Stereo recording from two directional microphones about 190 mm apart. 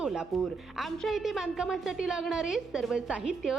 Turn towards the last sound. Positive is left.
turn(degrees=-5)  # may be behind; listen again after turning